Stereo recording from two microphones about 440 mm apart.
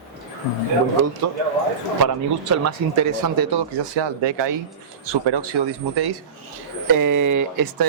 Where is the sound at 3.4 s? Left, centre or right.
Right.